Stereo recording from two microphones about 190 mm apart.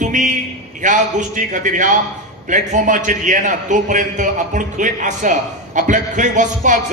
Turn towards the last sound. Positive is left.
turn(degrees=-40)  # may be behind; listen again after turning